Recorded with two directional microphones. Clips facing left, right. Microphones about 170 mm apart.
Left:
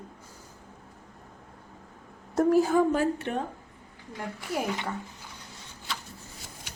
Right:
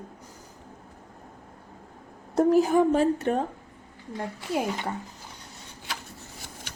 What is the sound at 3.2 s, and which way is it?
Speech, 40° right (ahead or behind).